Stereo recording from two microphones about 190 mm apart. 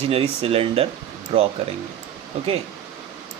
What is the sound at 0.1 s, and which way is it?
Speech, 30° right (ahead or behind).